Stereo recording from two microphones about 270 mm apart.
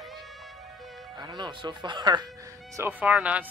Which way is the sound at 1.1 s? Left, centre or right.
Centre.